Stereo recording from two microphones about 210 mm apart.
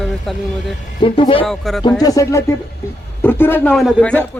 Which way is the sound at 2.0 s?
15° left (ahead or behind).